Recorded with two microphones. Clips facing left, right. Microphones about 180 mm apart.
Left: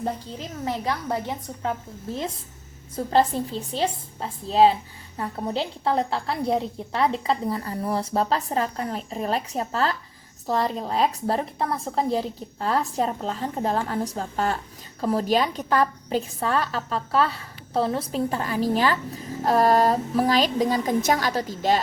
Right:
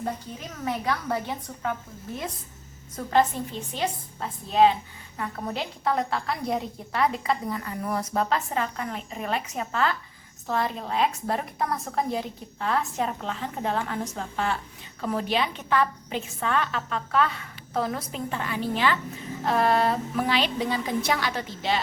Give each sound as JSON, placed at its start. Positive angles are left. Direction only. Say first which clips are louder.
{"t": 0.6, "sound": "a woman's voice", "louder": "even", "side_deg": 20}
{"t": 2.9, "sound": "a woman's voice", "louder": "left 2 dB", "side_deg": 30}